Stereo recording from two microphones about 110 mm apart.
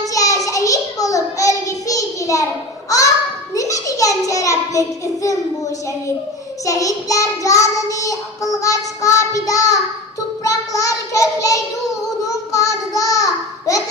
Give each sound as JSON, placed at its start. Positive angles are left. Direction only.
{"t": 0.0, "sound": "a sound", "side_deg": 30}
{"t": 0.5, "sound": "child singing", "side_deg": 30}
{"t": 3.5, "sound": "a sound", "side_deg": 30}
{"t": 6.6, "sound": "child singing", "side_deg": 30}
{"t": 10.4, "sound": "a child's voice", "side_deg": 30}
{"t": 12.2, "sound": "child singing", "side_deg": 30}